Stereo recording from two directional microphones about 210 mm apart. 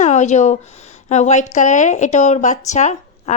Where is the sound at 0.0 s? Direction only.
35° left (ahead or behind).